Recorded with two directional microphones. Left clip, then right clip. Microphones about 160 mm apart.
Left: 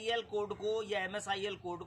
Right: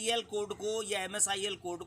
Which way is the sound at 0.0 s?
35° right (ahead or behind).